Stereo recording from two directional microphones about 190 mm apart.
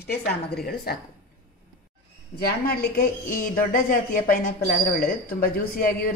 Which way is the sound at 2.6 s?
50° left (ahead or behind).